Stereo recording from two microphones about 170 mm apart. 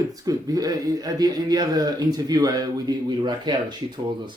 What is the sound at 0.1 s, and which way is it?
Speech, 20° right (ahead or behind).